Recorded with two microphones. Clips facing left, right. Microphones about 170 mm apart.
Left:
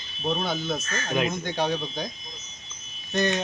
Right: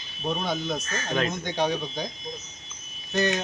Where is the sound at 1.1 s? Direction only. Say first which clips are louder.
Left 1 dB; 10° left (ahead or behind).